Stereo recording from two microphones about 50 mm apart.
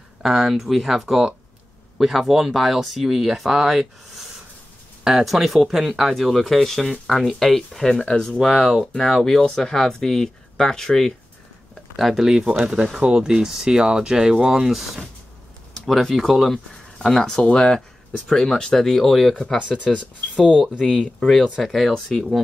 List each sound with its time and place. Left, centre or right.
0.2 s speech: centre
5.2 s speech: centre
8.5 s speech: centre
11.7 s speech: centre
15.7 s speech: centre
20.7 s speech: left
21.6 s speech: centre